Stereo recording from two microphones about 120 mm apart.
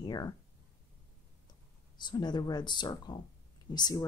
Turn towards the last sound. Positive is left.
turn(degrees=35)  # may be behind; listen again after turning